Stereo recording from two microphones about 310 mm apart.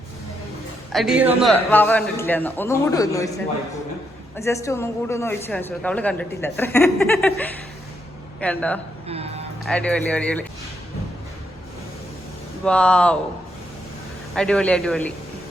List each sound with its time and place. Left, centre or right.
0.9 s a man's voice: centre
9.0 s speech: centre
9.6 s a man's voice: centre
12.6 s a man's voice: centre
14.3 s a man's voice: centre